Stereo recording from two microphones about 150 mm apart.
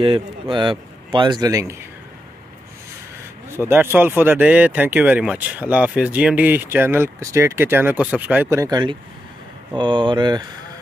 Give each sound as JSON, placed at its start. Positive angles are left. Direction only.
{"t": 0.0, "sound": "a man's voice", "side_deg": -35}
{"t": 3.6, "sound": "a man's voice", "side_deg": -15}